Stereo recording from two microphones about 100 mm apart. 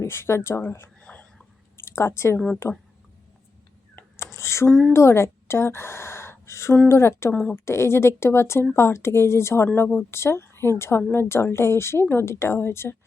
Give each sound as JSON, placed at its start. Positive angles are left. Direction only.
{"t": 0.0, "sound": "a woman's voice", "side_deg": 25}
{"t": 1.0, "sound": "whispering", "side_deg": 10}
{"t": 1.8, "sound": "a woman's voice", "side_deg": 25}
{"t": 3.9, "sound": "a sound", "side_deg": 25}
{"t": 4.7, "sound": "a woman's voice", "side_deg": 5}
{"t": 4.9, "sound": "a woman's voice", "side_deg": 25}